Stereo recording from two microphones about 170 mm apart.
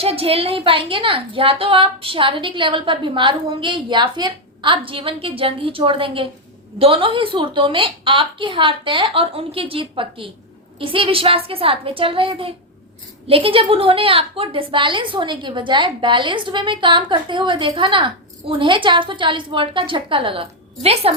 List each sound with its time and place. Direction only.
0.0 s a woman's voice: 35° right (ahead or behind)